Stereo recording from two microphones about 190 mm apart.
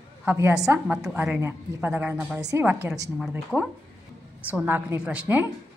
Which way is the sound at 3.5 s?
Centre (ahead or behind).